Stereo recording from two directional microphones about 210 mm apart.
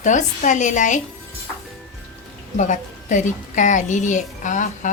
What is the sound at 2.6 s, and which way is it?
A woman's voice, 35° left (ahead or behind).